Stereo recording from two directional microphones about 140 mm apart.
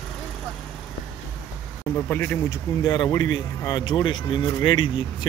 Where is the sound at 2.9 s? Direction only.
30° left (ahead or behind).